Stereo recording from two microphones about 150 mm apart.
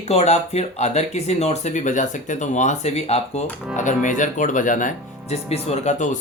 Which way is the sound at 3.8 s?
55° left (ahead or behind).